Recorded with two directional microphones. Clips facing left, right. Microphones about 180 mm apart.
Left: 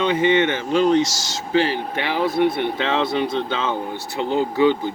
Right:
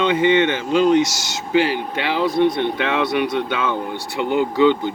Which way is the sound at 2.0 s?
15° left (ahead or behind).